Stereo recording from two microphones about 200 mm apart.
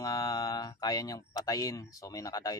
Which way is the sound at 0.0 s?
15° left (ahead or behind).